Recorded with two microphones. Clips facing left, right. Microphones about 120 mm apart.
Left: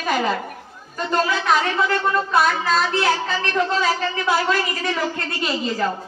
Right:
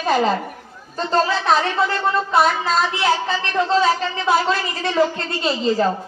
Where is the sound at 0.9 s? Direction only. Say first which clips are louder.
Right 2 dB; 30° right (ahead or behind).